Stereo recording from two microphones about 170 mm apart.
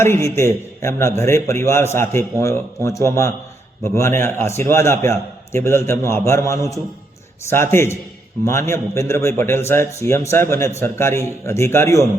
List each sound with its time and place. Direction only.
0.0 s a man's voice: 15° left (ahead or behind)